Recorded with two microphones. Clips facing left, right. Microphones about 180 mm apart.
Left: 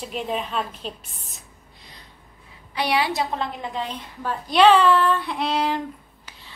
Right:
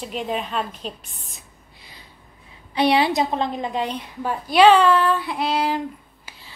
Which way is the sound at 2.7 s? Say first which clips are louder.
Right 5 dB; 25° right (ahead or behind).